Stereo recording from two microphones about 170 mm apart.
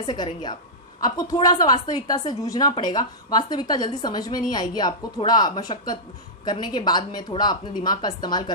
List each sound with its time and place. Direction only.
0.0 s a woman's voice: 25° left (ahead or behind)